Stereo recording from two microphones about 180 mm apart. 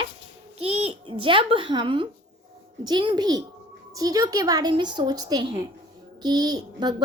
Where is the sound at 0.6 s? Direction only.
30° right (ahead or behind).